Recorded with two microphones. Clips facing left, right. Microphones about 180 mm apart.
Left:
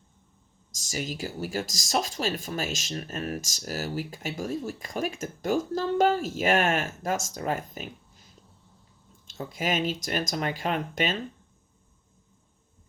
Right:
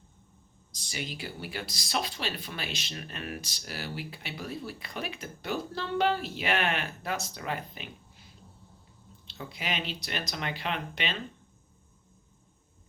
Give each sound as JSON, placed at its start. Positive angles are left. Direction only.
{"t": 0.7, "sound": "speech", "side_deg": 45}